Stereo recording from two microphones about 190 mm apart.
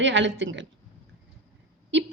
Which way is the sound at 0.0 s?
75° right (ahead or behind).